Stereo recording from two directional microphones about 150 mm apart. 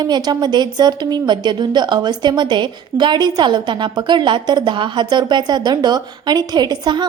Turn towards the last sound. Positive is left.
turn(degrees=-25)  # may be behind; listen again after turning